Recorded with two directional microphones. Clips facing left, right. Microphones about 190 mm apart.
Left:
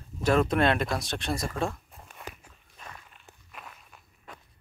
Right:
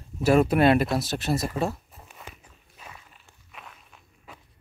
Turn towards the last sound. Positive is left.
turn(degrees=-5)  # may be behind; listen again after turning